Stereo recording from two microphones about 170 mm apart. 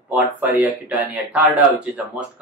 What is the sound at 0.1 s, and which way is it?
Speech, 10° right (ahead or behind).